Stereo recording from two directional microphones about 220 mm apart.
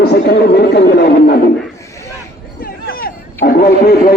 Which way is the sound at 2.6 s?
45° left (ahead or behind).